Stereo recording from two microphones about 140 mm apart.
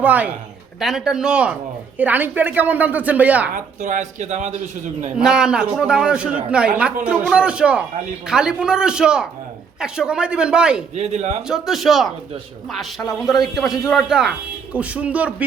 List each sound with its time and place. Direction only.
0.0 s a man's voice: 10° right (ahead or behind)
3.5 s speech: 60° right (ahead or behind)
5.1 s a man's voice: 5° right (ahead or behind)
10.9 s speech: 55° right (ahead or behind)
11.4 s a man's voice: 5° right (ahead or behind)